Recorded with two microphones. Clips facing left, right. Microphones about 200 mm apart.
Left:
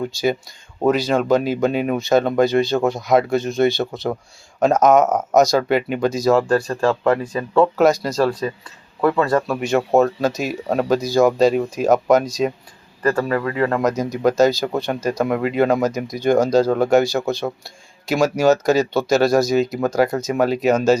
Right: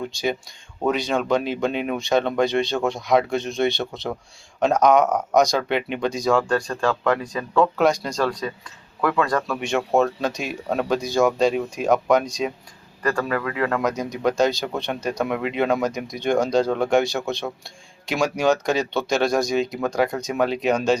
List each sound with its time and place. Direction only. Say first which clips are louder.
0.9 s speech: left 5 dB; centre (ahead or behind)
6.7 s speech: left 4 dB; 30° left (ahead or behind)
7.9 s speech: left 4 dB; 5° left (ahead or behind)
9.0 s speech: left 4 dB; 25° left (ahead or behind)
9.6 s speech: left 3 dB; centre (ahead or behind)
10.4 s speech: left 4 dB; 40° left (ahead or behind)
10.8 s speech: left 4 dB; 5° left (ahead or behind)
13.0 s speech: left 4 dB; 25° left (ahead or behind)
13.8 s speech: left 4 dB; centre (ahead or behind)